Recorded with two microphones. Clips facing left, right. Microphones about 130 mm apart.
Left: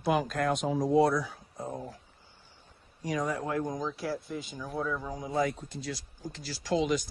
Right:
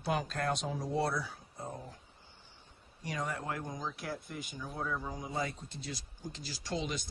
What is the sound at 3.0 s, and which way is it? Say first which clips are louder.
Speech: left 6 dB; 90° left.